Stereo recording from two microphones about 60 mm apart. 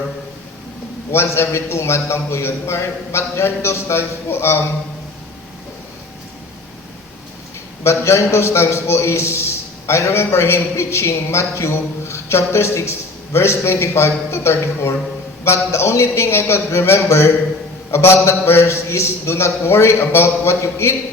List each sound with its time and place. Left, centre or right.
1.1 s a man's voice: left
7.9 s a man's voice: left